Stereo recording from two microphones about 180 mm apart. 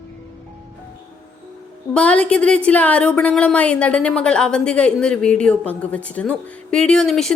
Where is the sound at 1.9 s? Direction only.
5° left (ahead or behind).